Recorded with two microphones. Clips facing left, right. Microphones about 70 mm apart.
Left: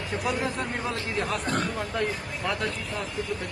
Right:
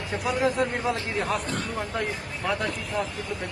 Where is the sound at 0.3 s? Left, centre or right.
Centre.